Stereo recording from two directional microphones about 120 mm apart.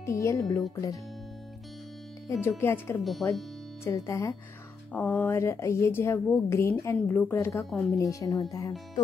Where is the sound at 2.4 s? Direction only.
20° left (ahead or behind).